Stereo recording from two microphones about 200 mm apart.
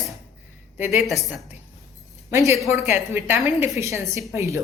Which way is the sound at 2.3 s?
15° right (ahead or behind).